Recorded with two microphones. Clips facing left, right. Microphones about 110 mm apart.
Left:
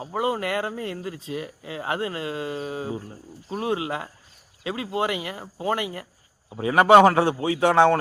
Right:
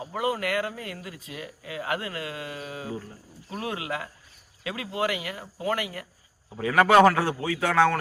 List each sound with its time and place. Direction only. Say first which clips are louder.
0.0 s speech: left 2 dB; 25° left (ahead or behind)